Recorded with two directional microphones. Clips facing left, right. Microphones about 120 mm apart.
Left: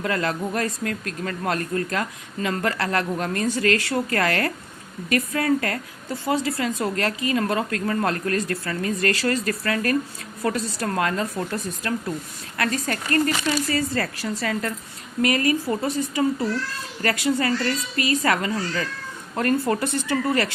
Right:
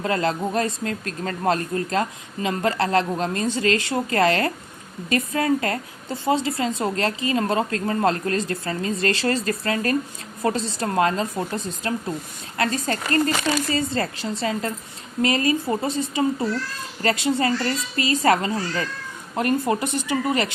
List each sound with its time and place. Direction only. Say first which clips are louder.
0.0 s a woman's voice: right 2 dB; 25° right (ahead or behind)
19.4 s speech: even; 15° right (ahead or behind)